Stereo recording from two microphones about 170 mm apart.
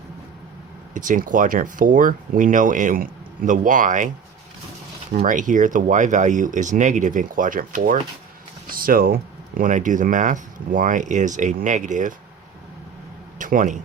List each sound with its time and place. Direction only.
0.9 s speech: 50° right (ahead or behind)
5.1 s speech: 50° right (ahead or behind)
8.7 s a sound: 60° right (ahead or behind)
9.6 s speech: 50° right (ahead or behind)
13.4 s a man's voice: 50° right (ahead or behind)